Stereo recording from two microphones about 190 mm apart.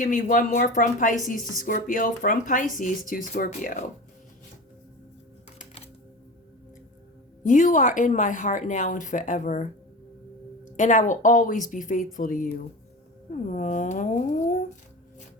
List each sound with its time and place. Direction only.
0.0 s speech: 45° left (ahead or behind)
5.5 s music: 35° left (ahead or behind)
7.4 s a woman's voice: 40° left (ahead or behind)
10.8 s a woman's voice: 40° left (ahead or behind)